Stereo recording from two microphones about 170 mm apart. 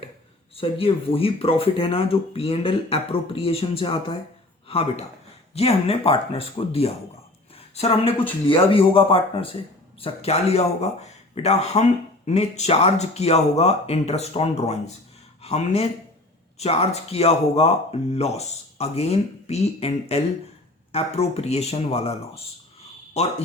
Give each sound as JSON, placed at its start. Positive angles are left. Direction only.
{"t": 0.5, "sound": "speech", "side_deg": 35}